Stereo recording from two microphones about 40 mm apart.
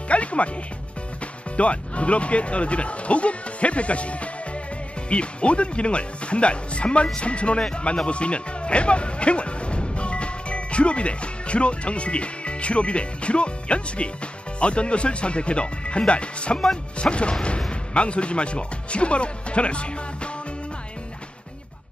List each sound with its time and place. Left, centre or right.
0.1 s music: left
1.2 s a man's voice: left